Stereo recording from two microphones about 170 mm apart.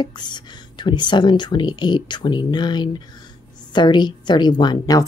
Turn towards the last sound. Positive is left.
turn(degrees=25)  # may be behind; listen again after turning